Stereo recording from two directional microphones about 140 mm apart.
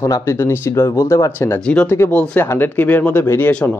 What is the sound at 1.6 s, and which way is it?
Speech, 5° left (ahead or behind).